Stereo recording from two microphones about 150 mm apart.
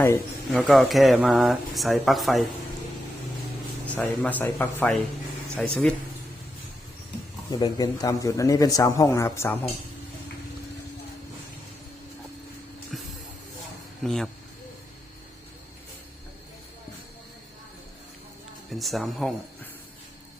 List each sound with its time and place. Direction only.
0.5 s speech: centre (ahead or behind)
3.8 s speech: 10° left (ahead or behind)
7.5 s a man's voice: 25° left (ahead or behind)
12.9 s spray: centre (ahead or behind)
14.0 s speech: centre (ahead or behind)
18.7 s speech: centre (ahead or behind)